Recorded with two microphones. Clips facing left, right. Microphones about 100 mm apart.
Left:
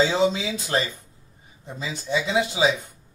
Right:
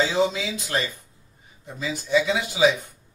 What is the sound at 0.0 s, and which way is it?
Speech, 25° left (ahead or behind).